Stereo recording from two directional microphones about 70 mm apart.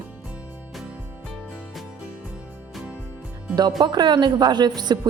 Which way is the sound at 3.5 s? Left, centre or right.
Right.